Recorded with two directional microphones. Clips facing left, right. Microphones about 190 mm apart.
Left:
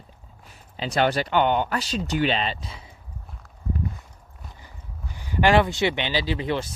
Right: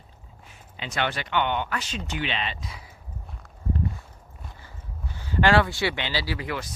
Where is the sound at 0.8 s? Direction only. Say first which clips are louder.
Left 7 dB; 35° left (ahead or behind).